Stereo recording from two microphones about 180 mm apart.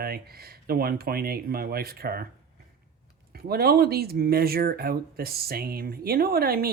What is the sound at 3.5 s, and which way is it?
Speech, 60° right (ahead or behind).